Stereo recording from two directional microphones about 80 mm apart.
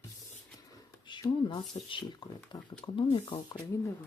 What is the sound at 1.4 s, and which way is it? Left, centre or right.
Speech, left.